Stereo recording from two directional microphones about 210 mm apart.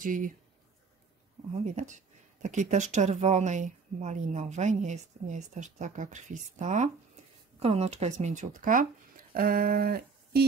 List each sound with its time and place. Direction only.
0.0 s speech: 40° right (ahead or behind)
1.5 s speech: 35° right (ahead or behind)